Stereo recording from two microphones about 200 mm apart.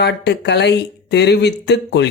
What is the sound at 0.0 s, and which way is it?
A woman's voice, 55° left (ahead or behind).